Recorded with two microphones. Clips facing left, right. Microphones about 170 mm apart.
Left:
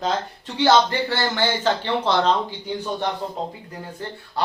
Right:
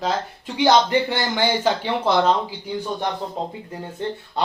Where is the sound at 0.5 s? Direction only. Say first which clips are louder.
Right 1 dB; 15° right (ahead or behind).